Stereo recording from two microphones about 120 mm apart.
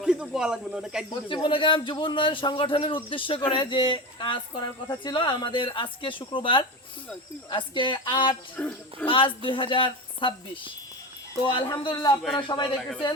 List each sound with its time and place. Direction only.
0.0 s speech: 5° right (ahead or behind)
1.1 s speech: 40° left (ahead or behind)
8.5 s speech: 10° left (ahead or behind)
9.0 s a man's voice: 45° left (ahead or behind)
12.6 s speech: centre (ahead or behind)